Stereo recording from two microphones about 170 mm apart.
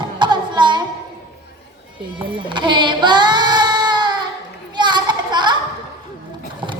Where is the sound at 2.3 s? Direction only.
30° right (ahead or behind).